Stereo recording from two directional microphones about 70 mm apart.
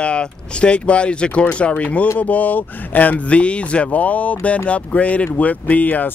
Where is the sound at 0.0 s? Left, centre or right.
Centre.